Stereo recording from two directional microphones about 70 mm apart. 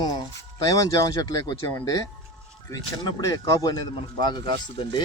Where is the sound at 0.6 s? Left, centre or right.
Left.